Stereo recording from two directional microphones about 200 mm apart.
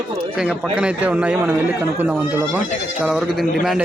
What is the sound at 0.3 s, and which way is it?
A man's voice, 5° right (ahead or behind).